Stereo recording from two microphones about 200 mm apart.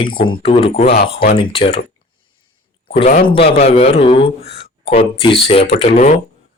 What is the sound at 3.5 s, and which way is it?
Speech, 30° left (ahead or behind).